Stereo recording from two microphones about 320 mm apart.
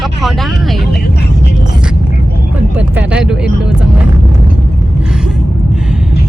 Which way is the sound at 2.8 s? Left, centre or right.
Centre.